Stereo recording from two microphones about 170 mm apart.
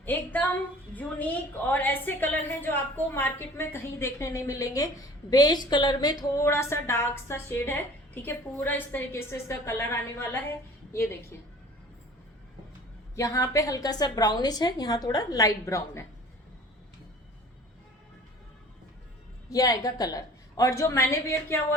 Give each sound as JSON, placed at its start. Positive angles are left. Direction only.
{"t": 0.0, "sound": "a sound", "side_deg": 10}
{"t": 0.9, "sound": "speech", "side_deg": 10}
{"t": 13.1, "sound": "a woman's voice", "side_deg": 20}
{"t": 19.5, "sound": "a woman's voice", "side_deg": 20}